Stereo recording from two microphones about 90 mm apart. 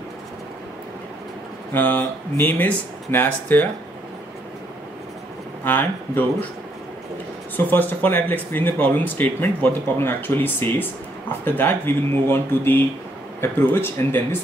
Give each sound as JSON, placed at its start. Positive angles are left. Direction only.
{"t": 1.7, "sound": "speech", "side_deg": 20}
{"t": 5.6, "sound": "speech", "side_deg": 20}
{"t": 7.5, "sound": "speech", "side_deg": 20}